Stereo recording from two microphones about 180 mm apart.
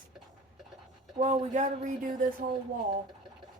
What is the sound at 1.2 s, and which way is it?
Speech, 40° right (ahead or behind).